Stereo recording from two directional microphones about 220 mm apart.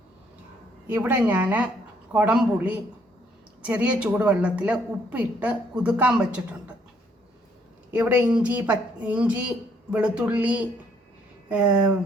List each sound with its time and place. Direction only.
0.9 s a woman's voice: 5° right (ahead or behind)
7.9 s a woman's voice: 10° right (ahead or behind)